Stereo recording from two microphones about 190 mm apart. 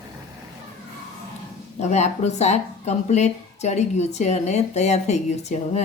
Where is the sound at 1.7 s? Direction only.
35° left (ahead or behind).